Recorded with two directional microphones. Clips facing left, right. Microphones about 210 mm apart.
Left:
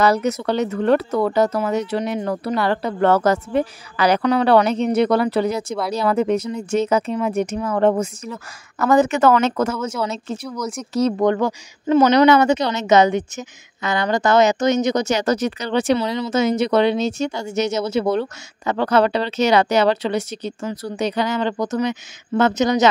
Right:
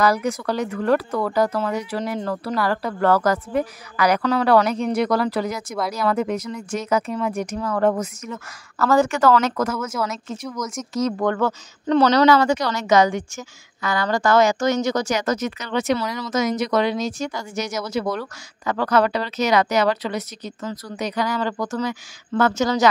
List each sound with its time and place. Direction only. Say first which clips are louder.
0.0 s a woman's voice: left 2 dB; 25° left (ahead or behind)
11.1 s a woman's voice: left 3 dB; 20° left (ahead or behind)